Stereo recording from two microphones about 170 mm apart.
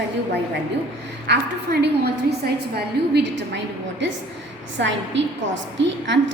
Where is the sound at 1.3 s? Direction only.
75° right (ahead or behind).